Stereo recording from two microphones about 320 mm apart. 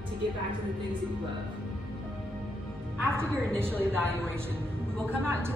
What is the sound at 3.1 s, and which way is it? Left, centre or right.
A man's voice, centre.